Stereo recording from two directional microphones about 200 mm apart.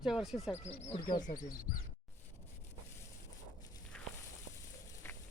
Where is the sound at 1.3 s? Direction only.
45° left (ahead or behind).